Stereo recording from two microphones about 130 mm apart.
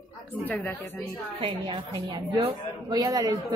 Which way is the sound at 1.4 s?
35° right (ahead or behind).